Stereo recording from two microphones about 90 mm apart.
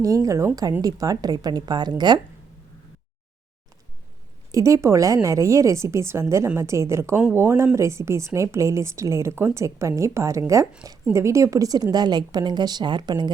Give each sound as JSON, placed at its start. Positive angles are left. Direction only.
{"t": 0.0, "sound": "a woman's voice", "side_deg": -40}
{"t": 4.5, "sound": "a woman's voice", "side_deg": -40}